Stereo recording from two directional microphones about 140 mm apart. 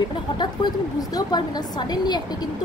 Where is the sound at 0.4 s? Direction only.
30° left (ahead or behind).